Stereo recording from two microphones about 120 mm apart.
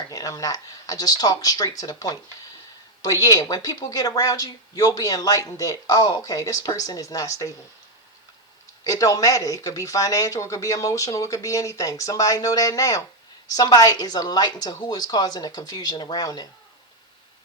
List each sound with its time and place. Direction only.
0.1 s a woman's voice: 30° left (ahead or behind)
8.8 s a woman's voice: 30° left (ahead or behind)